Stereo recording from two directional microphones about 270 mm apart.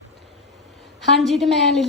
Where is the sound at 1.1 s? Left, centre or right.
Centre.